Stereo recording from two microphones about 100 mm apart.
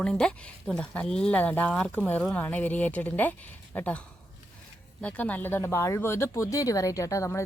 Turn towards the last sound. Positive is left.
turn(degrees=30)  # may be behind; listen again after turning